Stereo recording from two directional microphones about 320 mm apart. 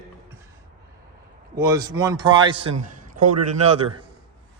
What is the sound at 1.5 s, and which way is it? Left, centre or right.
A man's voice, centre.